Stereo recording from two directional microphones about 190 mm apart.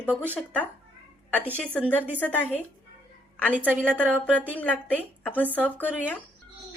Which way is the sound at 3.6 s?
10° right (ahead or behind).